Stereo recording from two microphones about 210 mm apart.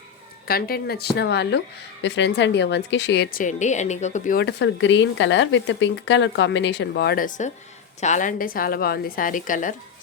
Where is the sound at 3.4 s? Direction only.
35° left (ahead or behind).